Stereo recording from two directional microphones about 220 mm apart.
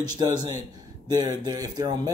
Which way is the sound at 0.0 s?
20° right (ahead or behind).